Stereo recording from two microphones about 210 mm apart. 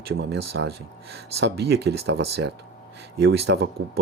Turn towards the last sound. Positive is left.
turn(degrees=-65)  # may be behind; listen again after turning